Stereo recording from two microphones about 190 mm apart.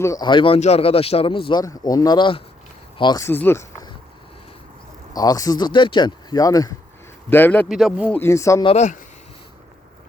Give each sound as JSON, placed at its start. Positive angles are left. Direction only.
{"t": 0.0, "sound": "a man's voice", "side_deg": 20}
{"t": 5.1, "sound": "a man's voice", "side_deg": 20}
{"t": 7.7, "sound": "speech", "side_deg": 0}
{"t": 8.1, "sound": "speech", "side_deg": 15}
{"t": 8.6, "sound": "speech", "side_deg": 35}